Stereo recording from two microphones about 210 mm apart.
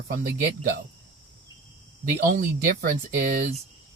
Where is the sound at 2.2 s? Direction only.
45° right (ahead or behind).